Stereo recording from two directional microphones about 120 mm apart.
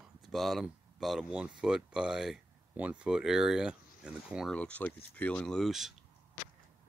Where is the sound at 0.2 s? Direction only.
Centre (ahead or behind).